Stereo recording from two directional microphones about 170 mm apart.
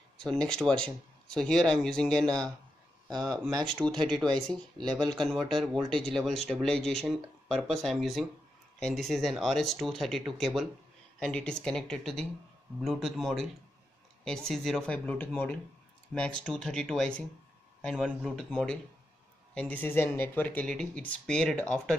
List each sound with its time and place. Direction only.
0.2 s speech: 5° left (ahead or behind)
3.5 s speech: 30° right (ahead or behind)
3.8 s speech: 5° left (ahead or behind)